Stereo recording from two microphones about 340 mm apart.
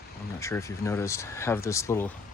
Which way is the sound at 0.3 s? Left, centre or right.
Centre.